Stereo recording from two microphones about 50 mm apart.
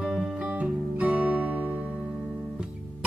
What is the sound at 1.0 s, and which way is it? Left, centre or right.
Music, right.